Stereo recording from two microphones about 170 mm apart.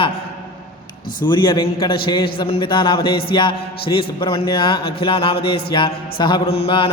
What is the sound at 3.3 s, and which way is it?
A man's voice, 30° left (ahead or behind).